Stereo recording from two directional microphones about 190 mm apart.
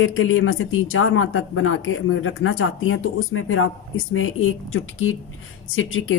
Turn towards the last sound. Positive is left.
turn(degrees=90)